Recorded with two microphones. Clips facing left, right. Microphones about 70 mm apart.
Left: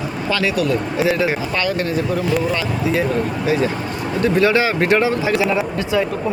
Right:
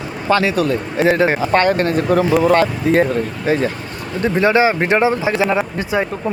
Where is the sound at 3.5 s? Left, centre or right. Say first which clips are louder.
Right 2 dB; right.